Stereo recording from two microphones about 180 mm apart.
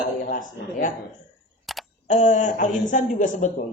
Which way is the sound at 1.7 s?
Centre (ahead or behind).